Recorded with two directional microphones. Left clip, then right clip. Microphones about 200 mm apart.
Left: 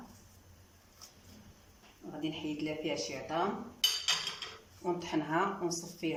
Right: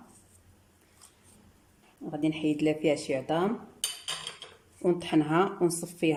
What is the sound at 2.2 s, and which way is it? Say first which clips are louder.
Speech: right 10 dB; 60° right (ahead or behind).